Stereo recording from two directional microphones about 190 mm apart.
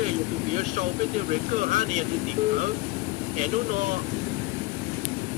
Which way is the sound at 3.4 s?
40° right (ahead or behind).